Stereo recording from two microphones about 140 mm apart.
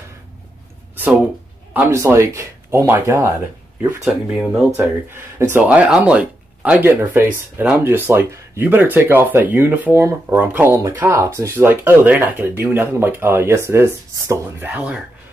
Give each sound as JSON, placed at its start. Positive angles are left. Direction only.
{"t": 1.7, "sound": "speech", "side_deg": -15}
{"t": 4.0, "sound": "speech", "side_deg": -5}
{"t": 4.7, "sound": "speech", "side_deg": -15}